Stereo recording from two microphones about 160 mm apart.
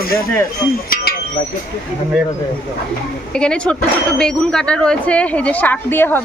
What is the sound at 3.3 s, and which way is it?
Speech, 5° left (ahead or behind).